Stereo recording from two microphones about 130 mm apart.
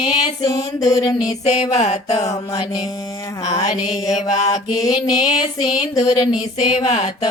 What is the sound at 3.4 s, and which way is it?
Mantra, 60° left (ahead or behind).